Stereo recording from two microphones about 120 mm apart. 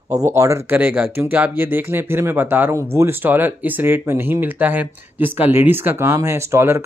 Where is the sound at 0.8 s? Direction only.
15° right (ahead or behind).